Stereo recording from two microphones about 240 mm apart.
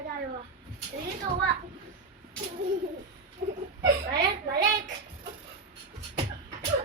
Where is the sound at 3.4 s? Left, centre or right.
Right.